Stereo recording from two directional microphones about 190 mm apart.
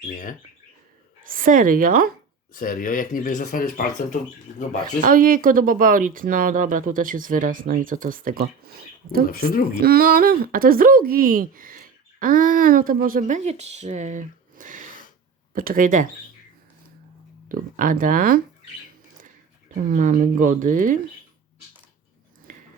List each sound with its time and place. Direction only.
1.2 s speech: 45° right (ahead or behind)
2.5 s speech: 45° left (ahead or behind)
5.0 s speech: 50° right (ahead or behind)
17.5 s speech: 45° right (ahead or behind)
19.9 s speech: 45° right (ahead or behind)